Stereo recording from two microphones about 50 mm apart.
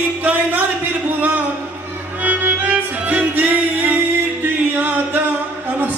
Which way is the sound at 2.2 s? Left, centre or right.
Right.